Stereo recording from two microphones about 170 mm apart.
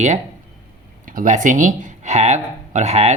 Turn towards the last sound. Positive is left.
turn(degrees=-40)  # may be behind; listen again after turning